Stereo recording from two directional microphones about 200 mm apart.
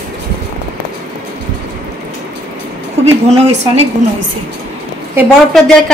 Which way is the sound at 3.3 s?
35° right (ahead or behind).